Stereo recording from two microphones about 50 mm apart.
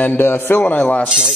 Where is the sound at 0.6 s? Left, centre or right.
Left.